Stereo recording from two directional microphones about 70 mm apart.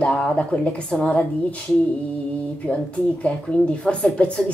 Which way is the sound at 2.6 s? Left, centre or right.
Centre.